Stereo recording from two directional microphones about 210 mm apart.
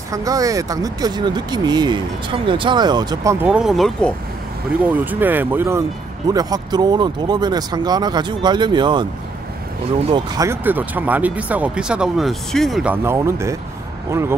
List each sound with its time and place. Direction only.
0.1 s speech: 15° right (ahead or behind)
3.4 s speech: 5° right (ahead or behind); by 9.0 s 20° right (ahead or behind)
10.0 s speech: 20° right (ahead or behind)